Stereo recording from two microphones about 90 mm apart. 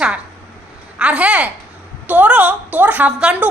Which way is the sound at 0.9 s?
10° right (ahead or behind).